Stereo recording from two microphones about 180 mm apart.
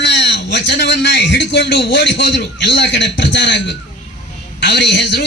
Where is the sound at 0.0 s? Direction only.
70° left (ahead or behind).